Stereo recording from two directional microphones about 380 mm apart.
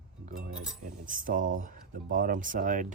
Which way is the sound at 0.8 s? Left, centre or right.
Right.